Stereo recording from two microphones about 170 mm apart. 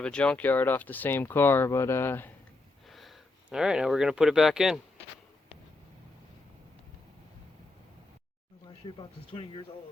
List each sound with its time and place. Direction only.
0.0 s speech: 5° left (ahead or behind)
2.9 s speech: centre (ahead or behind)
9.0 s speech: 30° left (ahead or behind)